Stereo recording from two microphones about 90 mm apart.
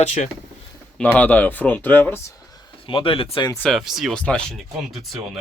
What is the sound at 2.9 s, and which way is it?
Speech, 85° left.